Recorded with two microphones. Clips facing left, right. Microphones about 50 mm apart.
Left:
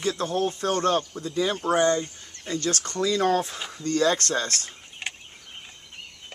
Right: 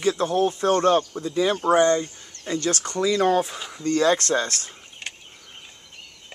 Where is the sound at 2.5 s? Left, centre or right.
Right.